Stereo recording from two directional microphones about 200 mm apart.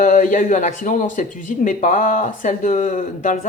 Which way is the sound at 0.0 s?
40° left (ahead or behind).